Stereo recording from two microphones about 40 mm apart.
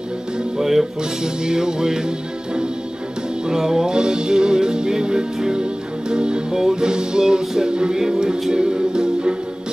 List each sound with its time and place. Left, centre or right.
0.6 s music: centre
1.2 s music: centre